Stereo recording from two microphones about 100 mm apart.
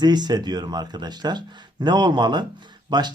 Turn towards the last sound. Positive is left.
turn(degrees=-45)  # may be behind; listen again after turning